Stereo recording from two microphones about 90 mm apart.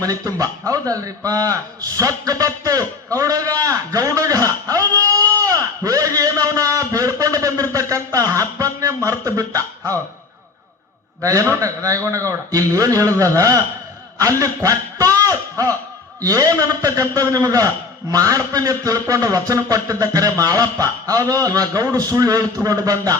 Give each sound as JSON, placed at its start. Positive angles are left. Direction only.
{"t": 0.0, "sound": "a man's voice", "side_deg": -40}
{"t": 11.2, "sound": "a man's voice", "side_deg": -35}
{"t": 14.2, "sound": "a sound", "side_deg": -40}
{"t": 16.2, "sound": "a man's voice", "side_deg": -40}